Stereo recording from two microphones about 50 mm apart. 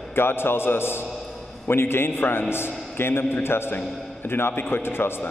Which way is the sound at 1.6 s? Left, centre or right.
Left.